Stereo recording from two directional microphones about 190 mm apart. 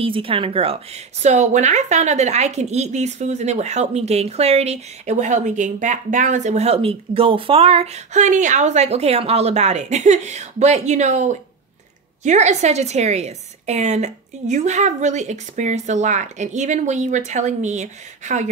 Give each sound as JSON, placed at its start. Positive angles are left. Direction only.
{"t": 0.0, "sound": "a woman's voice", "side_deg": -30}